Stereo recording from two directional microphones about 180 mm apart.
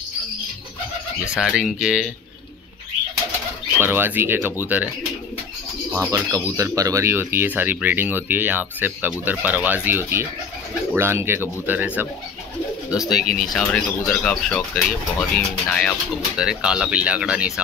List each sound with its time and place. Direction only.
1.3 s speech: 5° right (ahead or behind)
3.8 s speech: 10° right (ahead or behind)